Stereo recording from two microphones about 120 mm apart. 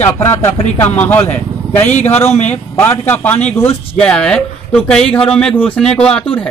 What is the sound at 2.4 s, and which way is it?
Speech, 15° left (ahead or behind).